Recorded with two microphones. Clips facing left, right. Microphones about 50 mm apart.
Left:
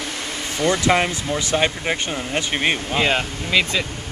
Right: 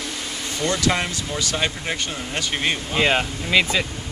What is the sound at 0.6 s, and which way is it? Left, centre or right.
Speech, left.